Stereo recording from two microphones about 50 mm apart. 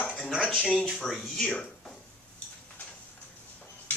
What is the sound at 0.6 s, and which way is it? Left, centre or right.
Speech, left.